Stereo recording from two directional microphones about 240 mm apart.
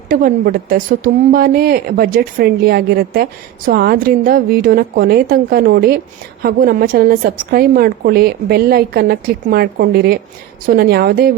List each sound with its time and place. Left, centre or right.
0.1 s a woman's voice: right